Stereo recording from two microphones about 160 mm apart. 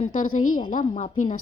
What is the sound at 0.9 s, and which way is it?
Speech, 45° left (ahead or behind).